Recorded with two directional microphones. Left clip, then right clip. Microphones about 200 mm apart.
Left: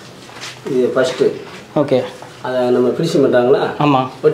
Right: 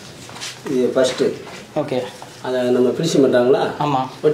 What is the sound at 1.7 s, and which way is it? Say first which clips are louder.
Speech: left 7 dB; 60° left (ahead or behind).